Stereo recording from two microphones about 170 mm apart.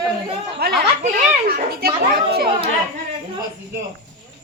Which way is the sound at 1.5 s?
60° right (ahead or behind).